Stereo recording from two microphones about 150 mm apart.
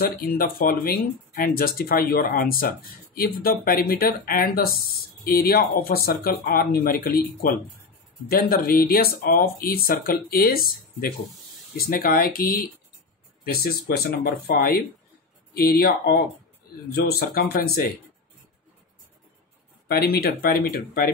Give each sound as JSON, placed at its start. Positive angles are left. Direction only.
{"t": 0.0, "sound": "speech", "side_deg": 75}
{"t": 6.0, "sound": "speech", "side_deg": 80}
{"t": 13.4, "sound": "speech", "side_deg": 90}
{"t": 19.9, "sound": "speech", "side_deg": 90}